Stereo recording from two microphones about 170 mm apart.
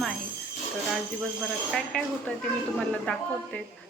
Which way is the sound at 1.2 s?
Centre (ahead or behind).